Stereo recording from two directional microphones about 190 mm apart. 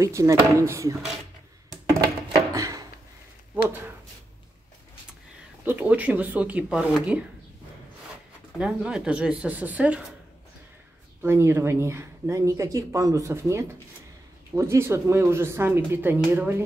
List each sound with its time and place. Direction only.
0.0 s speech: 15° right (ahead or behind)
2.5 s a sound: 20° right (ahead or behind)
5.7 s speech: 10° right (ahead or behind)
8.5 s speech: 5° right (ahead or behind)
11.2 s speech: 15° right (ahead or behind)